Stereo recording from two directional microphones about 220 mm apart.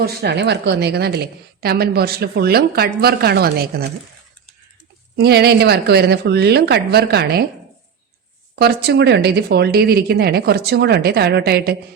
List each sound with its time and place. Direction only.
0.0 s a woman's voice: 45° right (ahead or behind)
5.1 s a woman's voice: 45° right (ahead or behind)
8.5 s a woman's voice: 50° right (ahead or behind)